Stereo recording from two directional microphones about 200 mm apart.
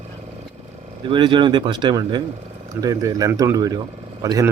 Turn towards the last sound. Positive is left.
turn(degrees=-15)  # may be behind; listen again after turning